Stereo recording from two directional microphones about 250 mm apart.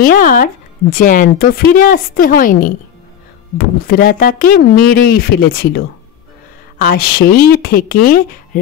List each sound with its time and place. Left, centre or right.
0.0 s speech: left